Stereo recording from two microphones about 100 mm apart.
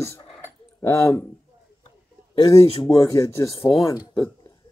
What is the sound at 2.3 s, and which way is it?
Speech, 35° left (ahead or behind).